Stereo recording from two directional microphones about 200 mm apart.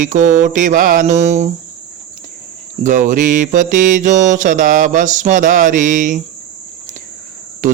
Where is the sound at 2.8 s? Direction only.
40° right (ahead or behind).